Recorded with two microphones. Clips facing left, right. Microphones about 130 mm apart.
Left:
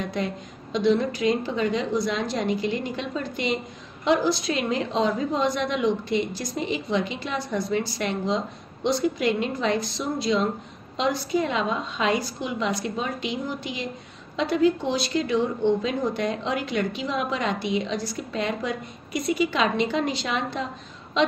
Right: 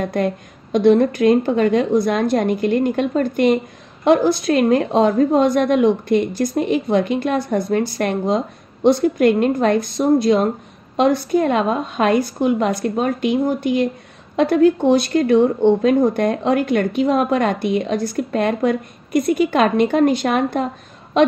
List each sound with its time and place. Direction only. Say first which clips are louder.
0.0 s a woman's voice: right 8 dB; 55° right (ahead or behind)